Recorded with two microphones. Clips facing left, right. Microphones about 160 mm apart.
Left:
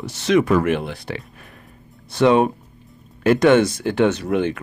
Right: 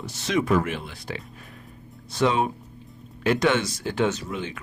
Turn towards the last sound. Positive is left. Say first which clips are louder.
# left 8 dB
turn(degrees=65)  # may be behind; listen again after turning